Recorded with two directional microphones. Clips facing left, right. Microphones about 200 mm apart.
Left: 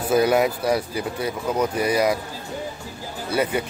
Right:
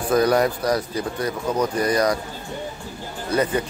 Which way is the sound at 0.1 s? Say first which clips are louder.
Even; 5° left (ahead or behind).